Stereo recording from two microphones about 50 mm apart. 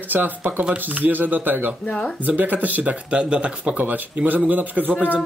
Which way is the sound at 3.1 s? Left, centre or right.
Right.